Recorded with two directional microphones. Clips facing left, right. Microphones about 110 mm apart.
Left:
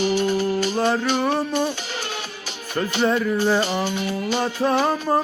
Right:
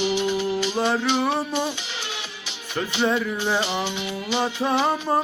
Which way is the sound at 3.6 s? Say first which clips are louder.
Left 3 dB; 45° left (ahead or behind).